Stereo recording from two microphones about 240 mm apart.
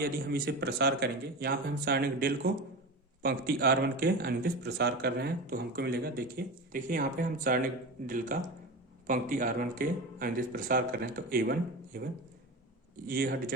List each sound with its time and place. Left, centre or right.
0.0 s speech: right